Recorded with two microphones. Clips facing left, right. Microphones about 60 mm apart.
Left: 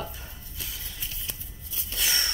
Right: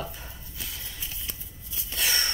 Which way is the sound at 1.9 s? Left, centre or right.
Right.